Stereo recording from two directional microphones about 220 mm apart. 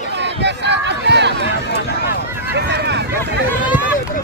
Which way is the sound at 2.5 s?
50° right (ahead or behind).